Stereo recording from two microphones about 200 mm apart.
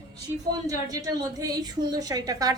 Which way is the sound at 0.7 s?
15° right (ahead or behind).